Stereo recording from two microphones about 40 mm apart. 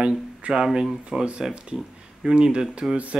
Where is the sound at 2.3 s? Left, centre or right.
Right.